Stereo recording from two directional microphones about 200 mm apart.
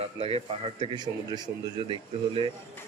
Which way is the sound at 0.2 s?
30° right (ahead or behind).